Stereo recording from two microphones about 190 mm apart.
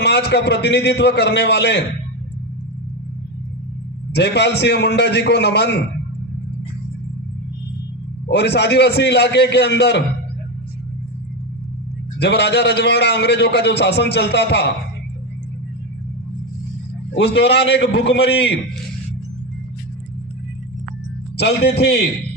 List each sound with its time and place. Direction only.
0.0 s a man's voice: 60° left (ahead or behind)
4.1 s a man's voice: 65° left (ahead or behind)
8.3 s a man's voice: 60° left (ahead or behind)
12.2 s a man's voice: 60° left (ahead or behind)
17.2 s a man's voice: 65° left (ahead or behind)
21.3 s a man's voice: 60° left (ahead or behind)